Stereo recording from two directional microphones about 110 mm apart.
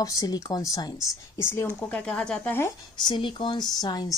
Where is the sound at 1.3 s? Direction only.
25° left (ahead or behind); by 2.4 s 10° left (ahead or behind).